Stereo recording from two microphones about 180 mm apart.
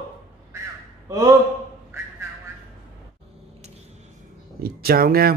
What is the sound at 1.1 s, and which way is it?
Speech, 20° right (ahead or behind).